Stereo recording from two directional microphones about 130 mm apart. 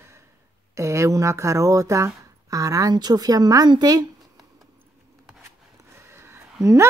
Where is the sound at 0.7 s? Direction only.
20° right (ahead or behind).